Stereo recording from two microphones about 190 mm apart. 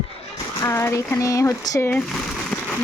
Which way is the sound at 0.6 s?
15° left (ahead or behind).